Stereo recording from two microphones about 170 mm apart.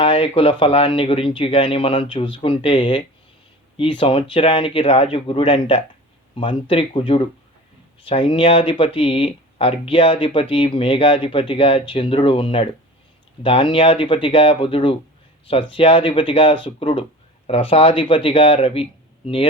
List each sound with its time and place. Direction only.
0.0 s speech: 30° left (ahead or behind)